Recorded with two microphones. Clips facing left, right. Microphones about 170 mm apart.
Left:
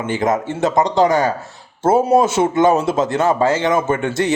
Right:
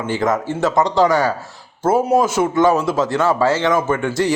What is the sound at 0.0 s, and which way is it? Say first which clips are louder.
A man's voice: left 1 dB; 20° left (ahead or behind).